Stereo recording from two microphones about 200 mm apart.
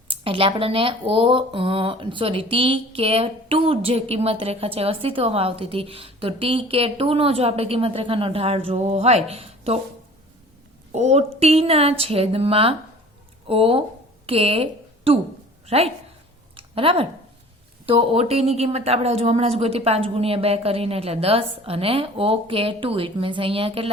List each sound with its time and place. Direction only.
0.1 s speech: 25° right (ahead or behind)
10.9 s a woman's voice: 35° right (ahead or behind)
16.6 s a sound: 25° right (ahead or behind)
17.8 s speech: 30° right (ahead or behind)